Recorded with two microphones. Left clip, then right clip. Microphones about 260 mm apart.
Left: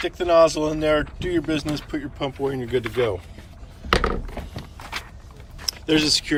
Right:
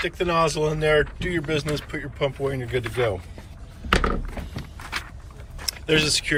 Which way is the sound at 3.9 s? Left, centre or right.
Left.